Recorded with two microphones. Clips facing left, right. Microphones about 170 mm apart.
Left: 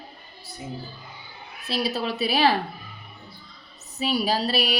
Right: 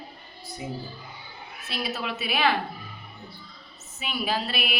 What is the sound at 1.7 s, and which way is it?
Speech, 35° left (ahead or behind).